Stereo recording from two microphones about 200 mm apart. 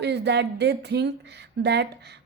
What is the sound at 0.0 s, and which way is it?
Speech, 60° right (ahead or behind).